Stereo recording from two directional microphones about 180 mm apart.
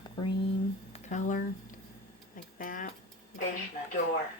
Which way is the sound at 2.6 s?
50° left (ahead or behind).